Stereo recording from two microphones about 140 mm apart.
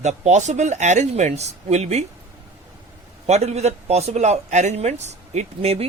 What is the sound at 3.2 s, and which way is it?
A man's voice, 50° right (ahead or behind).